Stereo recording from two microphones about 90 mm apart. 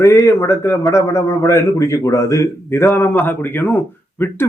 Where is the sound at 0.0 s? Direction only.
35° left (ahead or behind).